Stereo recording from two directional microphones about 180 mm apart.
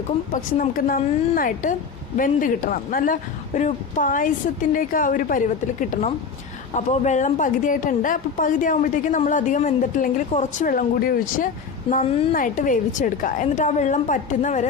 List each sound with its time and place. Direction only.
0.3 s speech: 50° left (ahead or behind)